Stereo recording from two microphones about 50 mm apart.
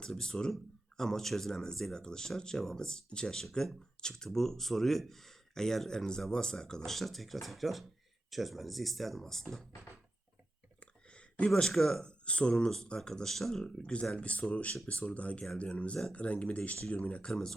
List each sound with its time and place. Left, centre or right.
0.0 s speech: centre
10.8 s a sound: left
11.7 s speech: centre
12.0 s speech: left